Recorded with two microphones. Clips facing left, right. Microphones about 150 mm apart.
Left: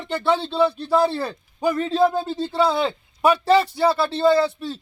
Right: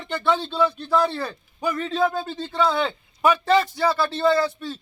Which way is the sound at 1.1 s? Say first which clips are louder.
Left 3 dB; 10° left (ahead or behind).